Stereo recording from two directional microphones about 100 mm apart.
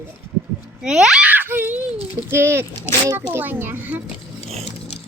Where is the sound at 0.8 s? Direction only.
5° right (ahead or behind).